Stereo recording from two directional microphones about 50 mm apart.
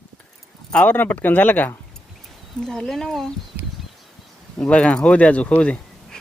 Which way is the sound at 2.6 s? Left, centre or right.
Centre.